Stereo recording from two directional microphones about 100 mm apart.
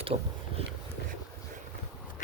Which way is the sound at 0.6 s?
80° right.